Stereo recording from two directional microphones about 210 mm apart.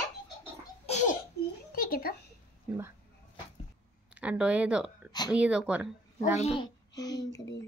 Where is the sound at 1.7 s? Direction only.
45° left (ahead or behind).